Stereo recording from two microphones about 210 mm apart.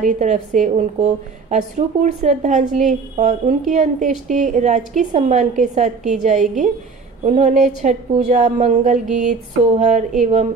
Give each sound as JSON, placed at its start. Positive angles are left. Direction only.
{"t": 0.0, "sound": "a woman's voice", "side_deg": -35}